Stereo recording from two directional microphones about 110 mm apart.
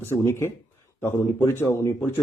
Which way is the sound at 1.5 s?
20° left (ahead or behind).